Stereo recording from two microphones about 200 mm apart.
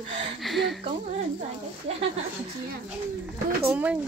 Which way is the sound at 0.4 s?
Centre (ahead or behind).